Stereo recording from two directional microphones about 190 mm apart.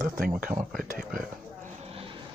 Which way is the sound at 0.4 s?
45° right (ahead or behind).